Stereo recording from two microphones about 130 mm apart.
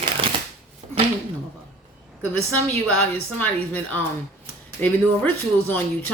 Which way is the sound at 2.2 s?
15° left (ahead or behind).